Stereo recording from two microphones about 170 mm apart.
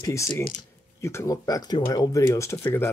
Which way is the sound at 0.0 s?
20° left (ahead or behind).